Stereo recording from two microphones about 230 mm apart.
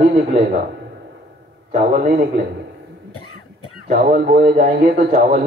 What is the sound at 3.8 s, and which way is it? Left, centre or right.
A man's voice, right.